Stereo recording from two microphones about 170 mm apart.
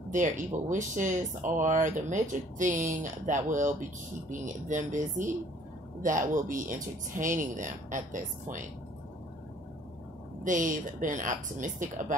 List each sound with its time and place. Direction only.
0.1 s speech: 50° right (ahead or behind)
10.4 s speech: 50° right (ahead or behind)